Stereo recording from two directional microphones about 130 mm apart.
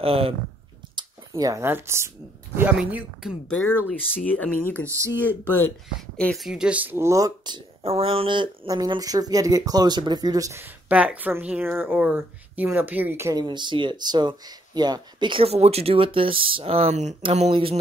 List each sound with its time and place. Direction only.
0.0 s speech: 45° right (ahead or behind)
0.8 s a sound: 35° right (ahead or behind)
1.3 s a woman's voice: 25° right (ahead or behind); by 3.5 s 5° right (ahead or behind)
3.6 s speech: 10° left (ahead or behind)
4.8 s speech: 20° right (ahead or behind)
6.1 s a woman's voice: 5° left (ahead or behind); by 7.6 s 30° right (ahead or behind)
7.8 s speech: 50° right (ahead or behind); by 13.3 s 15° right (ahead or behind)
13.3 s speech: 35° right (ahead or behind)